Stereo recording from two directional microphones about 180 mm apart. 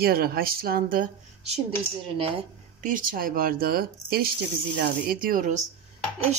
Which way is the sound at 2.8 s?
50° right (ahead or behind).